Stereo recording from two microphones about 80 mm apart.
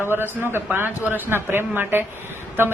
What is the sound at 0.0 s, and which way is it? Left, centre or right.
A woman's voice, right.